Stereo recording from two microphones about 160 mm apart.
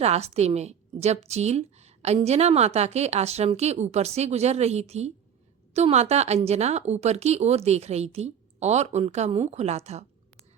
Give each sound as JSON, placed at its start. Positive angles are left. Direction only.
{"t": 0.0, "sound": "a woman's voice", "side_deg": -40}